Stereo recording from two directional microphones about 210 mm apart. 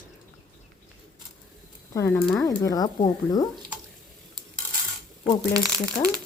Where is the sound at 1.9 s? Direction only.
15° left (ahead or behind).